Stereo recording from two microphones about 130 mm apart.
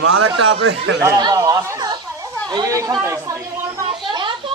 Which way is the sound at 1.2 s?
30° right (ahead or behind).